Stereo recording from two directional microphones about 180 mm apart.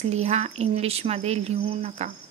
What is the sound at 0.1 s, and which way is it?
Speech, 35° right (ahead or behind).